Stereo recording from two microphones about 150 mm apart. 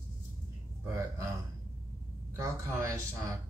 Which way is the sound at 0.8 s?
20° right (ahead or behind).